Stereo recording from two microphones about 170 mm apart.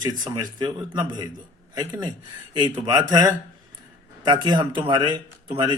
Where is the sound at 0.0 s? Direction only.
25° right (ahead or behind).